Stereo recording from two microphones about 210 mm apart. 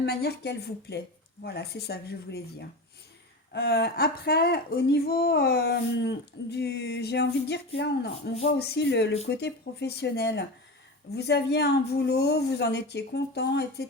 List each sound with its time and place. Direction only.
0.0 s speech: 50° left (ahead or behind)